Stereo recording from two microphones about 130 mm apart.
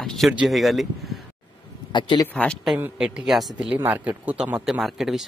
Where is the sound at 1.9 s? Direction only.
35° left (ahead or behind).